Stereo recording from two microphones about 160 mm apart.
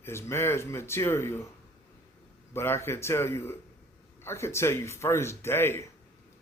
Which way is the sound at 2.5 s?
15° left (ahead or behind).